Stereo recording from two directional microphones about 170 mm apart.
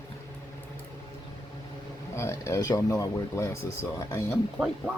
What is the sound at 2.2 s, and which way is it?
Speech, 15° left (ahead or behind).